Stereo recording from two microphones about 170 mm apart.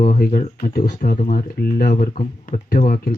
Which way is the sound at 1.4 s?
60° left (ahead or behind).